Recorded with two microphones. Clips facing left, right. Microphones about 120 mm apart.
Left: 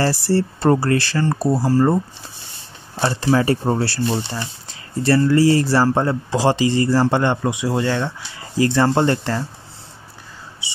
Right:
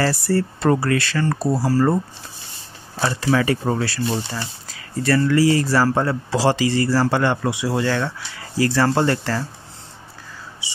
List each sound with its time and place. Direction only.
0.0 s speech: 30° left (ahead or behind)
3.0 s speech: 25° left (ahead or behind)